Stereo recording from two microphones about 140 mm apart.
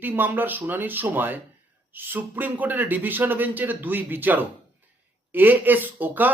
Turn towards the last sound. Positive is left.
turn(degrees=-15)  # may be behind; listen again after turning